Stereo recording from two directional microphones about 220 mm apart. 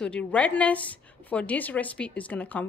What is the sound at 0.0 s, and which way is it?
A woman's voice, 5° left (ahead or behind).